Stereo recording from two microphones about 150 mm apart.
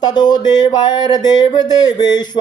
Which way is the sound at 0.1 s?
30° left (ahead or behind).